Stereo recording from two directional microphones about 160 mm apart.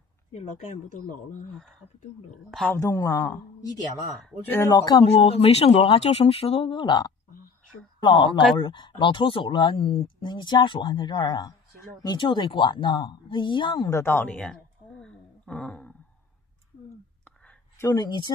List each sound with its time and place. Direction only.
0.3 s speech: 45° left (ahead or behind)
2.5 s speech: 5° left (ahead or behind)
2.8 s a woman's voice: 20° left (ahead or behind)
5.0 s speech: 40° left (ahead or behind)
8.3 s speech: centre (ahead or behind)
8.5 s a woman's voice: 30° left (ahead or behind); by 15.9 s 5° left (ahead or behind)
17.7 s a woman's voice: 25° left (ahead or behind)